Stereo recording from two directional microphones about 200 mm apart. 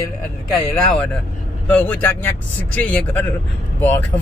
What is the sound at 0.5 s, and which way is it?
Speech, 5° left (ahead or behind).